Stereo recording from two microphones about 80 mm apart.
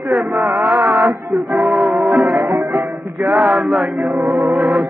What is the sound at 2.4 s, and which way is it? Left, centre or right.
Music, right.